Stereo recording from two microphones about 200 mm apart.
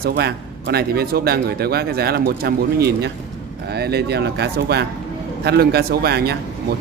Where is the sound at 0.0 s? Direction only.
55° right (ahead or behind).